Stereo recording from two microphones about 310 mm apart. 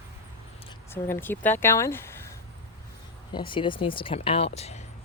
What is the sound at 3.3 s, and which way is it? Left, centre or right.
Speech, centre.